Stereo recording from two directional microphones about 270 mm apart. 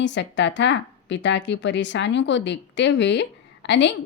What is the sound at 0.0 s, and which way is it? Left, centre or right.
A woman's voice, left.